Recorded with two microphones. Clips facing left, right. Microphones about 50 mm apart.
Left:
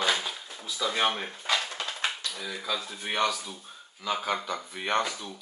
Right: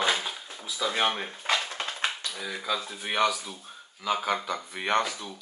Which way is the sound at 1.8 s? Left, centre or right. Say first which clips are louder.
Right 1 dB; centre.